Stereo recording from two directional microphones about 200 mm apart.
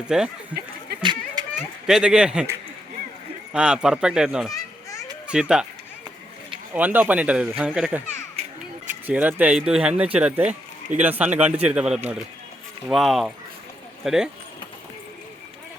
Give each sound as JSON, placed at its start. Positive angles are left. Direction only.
{"t": 0.0, "sound": "speech", "side_deg": -5}
{"t": 1.0, "sound": "children playing", "side_deg": -20}
{"t": 1.9, "sound": "speech", "side_deg": -5}
{"t": 4.5, "sound": "children playing", "side_deg": 15}
{"t": 5.3, "sound": "speech", "side_deg": -5}
{"t": 6.7, "sound": "speech", "side_deg": -10}
{"t": 9.0, "sound": "speech", "side_deg": -10}
{"t": 10.4, "sound": "speech", "side_deg": -35}
{"t": 11.0, "sound": "speech", "side_deg": -5}